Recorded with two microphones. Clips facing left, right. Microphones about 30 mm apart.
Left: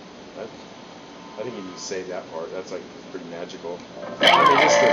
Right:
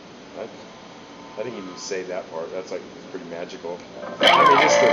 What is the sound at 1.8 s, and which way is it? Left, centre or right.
Speech, centre.